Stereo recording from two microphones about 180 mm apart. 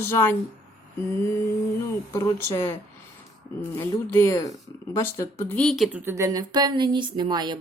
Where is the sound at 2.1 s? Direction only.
15° left (ahead or behind); by 7.6 s 25° right (ahead or behind).